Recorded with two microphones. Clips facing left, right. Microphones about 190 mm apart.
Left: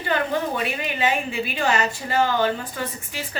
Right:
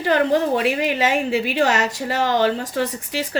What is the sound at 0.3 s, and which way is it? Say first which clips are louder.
A woman's voice: right 6 dB; 80° right.